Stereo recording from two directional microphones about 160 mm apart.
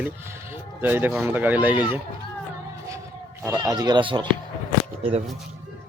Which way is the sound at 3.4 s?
20° right (ahead or behind).